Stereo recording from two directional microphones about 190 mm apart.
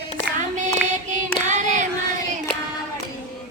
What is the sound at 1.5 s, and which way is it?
Child singing, 40° right (ahead or behind).